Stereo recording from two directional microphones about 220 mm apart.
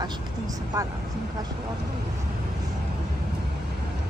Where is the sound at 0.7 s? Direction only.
15° right (ahead or behind).